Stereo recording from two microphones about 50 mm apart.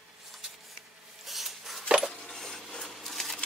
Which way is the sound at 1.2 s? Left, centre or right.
Centre.